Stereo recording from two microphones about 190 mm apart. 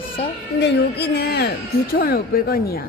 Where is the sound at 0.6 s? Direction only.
60° left (ahead or behind).